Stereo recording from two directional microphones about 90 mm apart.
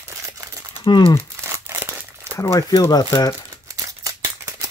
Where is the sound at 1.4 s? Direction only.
25° right (ahead or behind).